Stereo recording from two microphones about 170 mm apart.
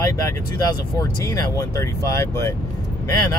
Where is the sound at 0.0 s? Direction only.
20° left (ahead or behind).